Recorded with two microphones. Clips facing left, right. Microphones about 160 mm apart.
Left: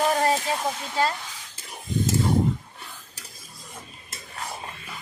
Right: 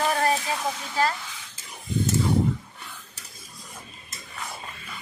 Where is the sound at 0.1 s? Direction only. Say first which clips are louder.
Left 2 dB; 25° left (ahead or behind).